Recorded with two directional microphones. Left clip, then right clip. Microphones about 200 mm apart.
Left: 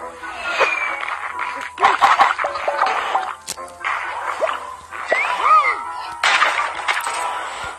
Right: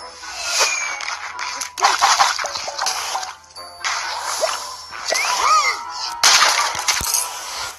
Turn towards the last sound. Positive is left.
turn(degrees=-45)  # may be behind; listen again after turning